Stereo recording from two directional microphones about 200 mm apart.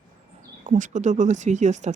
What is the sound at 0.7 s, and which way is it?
Speech, 40° right (ahead or behind).